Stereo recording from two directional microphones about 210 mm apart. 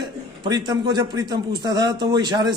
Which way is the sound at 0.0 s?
20° right (ahead or behind).